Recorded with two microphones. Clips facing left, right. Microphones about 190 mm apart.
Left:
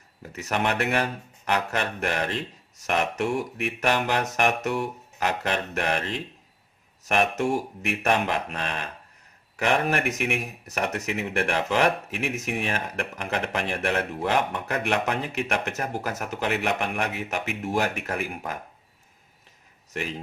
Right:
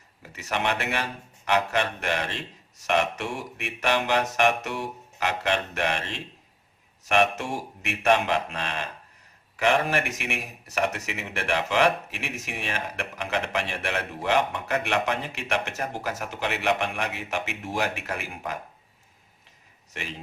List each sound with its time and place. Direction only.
0.2 s speech: 45° left (ahead or behind)